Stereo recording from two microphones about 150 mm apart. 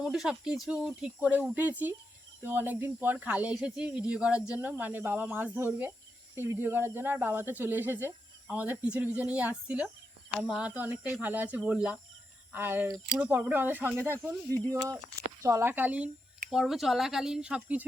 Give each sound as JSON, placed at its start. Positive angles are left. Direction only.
{"t": 0.0, "sound": "speech", "side_deg": -5}